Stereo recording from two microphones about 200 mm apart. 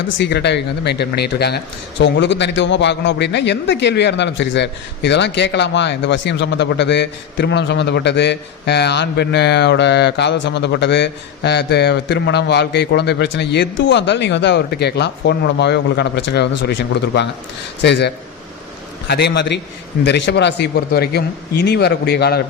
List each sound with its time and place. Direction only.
0.2 s speech: 55° left (ahead or behind)